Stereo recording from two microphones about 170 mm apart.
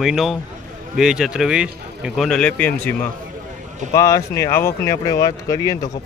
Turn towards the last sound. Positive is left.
turn(degrees=20)  # may be behind; listen again after turning